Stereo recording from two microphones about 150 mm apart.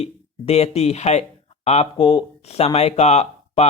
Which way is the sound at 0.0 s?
45° left (ahead or behind).